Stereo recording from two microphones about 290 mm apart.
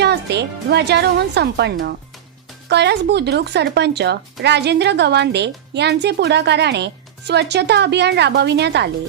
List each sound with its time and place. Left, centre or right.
0.0 s speech: right